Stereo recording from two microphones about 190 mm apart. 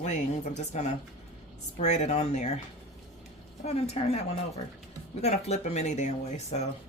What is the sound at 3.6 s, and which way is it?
Speech, 35° left (ahead or behind).